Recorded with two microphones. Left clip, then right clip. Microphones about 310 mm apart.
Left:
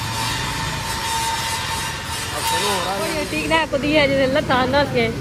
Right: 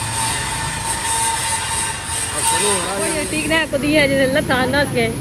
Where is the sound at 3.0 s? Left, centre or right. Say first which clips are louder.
Right 2 dB; left.